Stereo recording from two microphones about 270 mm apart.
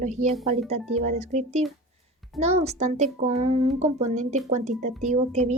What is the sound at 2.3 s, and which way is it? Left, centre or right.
Speech, right.